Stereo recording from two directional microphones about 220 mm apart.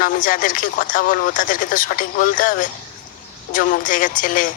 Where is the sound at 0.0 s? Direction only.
40° left (ahead or behind).